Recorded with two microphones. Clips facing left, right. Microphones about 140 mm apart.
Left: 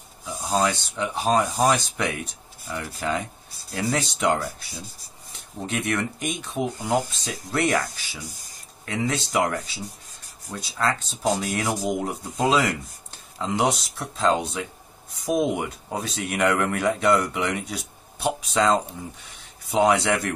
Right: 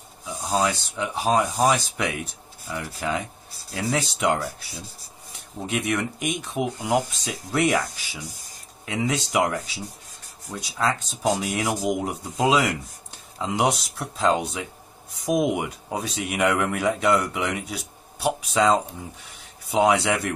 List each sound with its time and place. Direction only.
0.2 s speech: centre (ahead or behind)
10.7 s speech: 5° right (ahead or behind)